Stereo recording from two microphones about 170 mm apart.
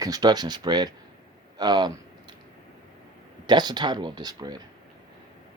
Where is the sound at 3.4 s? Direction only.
25° right (ahead or behind).